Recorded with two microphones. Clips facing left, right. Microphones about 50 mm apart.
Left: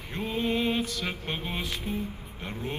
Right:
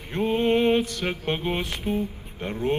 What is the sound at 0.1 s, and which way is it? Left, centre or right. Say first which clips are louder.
Music: right 7 dB; right.